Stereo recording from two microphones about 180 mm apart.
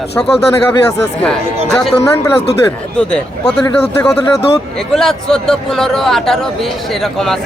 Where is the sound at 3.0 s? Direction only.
5° left (ahead or behind).